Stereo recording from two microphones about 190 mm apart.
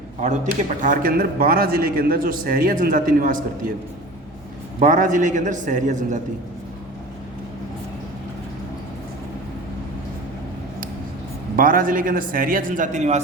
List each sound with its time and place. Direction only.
0.8 s a man's voice: 45° right (ahead or behind)
4.8 s a man's voice: 40° right (ahead or behind)
11.5 s a man's voice: 45° right (ahead or behind)